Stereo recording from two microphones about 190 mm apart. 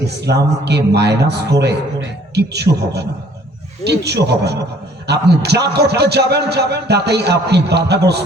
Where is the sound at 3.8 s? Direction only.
60° right (ahead or behind).